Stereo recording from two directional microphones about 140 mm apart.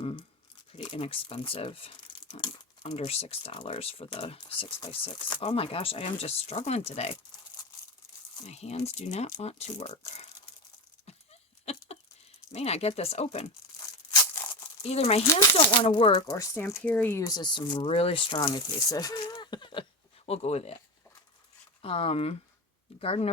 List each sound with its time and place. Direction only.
0.0 s crumpling: 40° left (ahead or behind)
0.8 s speech: 40° left (ahead or behind)
8.4 s speech: 50° left (ahead or behind)
11.6 s a sound: 45° left (ahead or behind)
12.5 s speech: 50° left (ahead or behind)
14.8 s speech: 50° left (ahead or behind)
16.1 s speech: 25° left (ahead or behind)
20.2 s speech: 50° left (ahead or behind)
21.8 s speech: 45° left (ahead or behind)